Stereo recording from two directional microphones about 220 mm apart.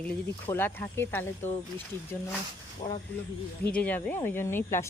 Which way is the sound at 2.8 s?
20° left (ahead or behind).